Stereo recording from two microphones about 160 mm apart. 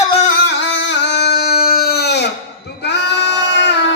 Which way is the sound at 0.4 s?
90° left.